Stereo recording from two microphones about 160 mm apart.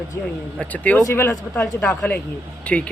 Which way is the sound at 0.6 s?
10° left (ahead or behind).